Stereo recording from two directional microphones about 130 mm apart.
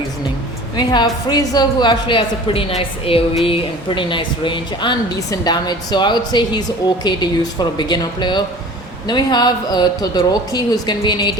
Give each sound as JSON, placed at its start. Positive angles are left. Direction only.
{"t": 0.8, "sound": "a woman's voice", "side_deg": 30}